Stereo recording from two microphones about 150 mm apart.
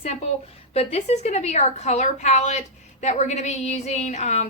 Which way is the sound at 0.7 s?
40° left (ahead or behind).